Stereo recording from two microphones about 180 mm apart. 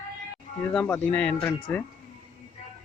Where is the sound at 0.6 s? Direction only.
5° left (ahead or behind).